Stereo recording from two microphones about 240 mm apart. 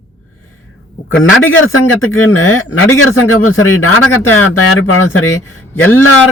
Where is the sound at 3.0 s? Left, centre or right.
Left.